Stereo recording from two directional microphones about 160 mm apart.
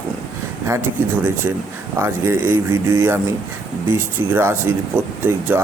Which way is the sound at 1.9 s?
15° right (ahead or behind).